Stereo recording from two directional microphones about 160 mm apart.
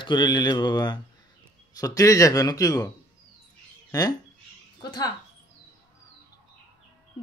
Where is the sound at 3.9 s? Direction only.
25° left (ahead or behind).